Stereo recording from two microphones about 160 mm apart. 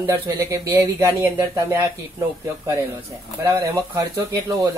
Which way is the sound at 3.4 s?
15° right (ahead or behind).